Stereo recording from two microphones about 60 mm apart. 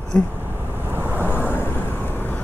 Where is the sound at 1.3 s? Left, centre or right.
Left.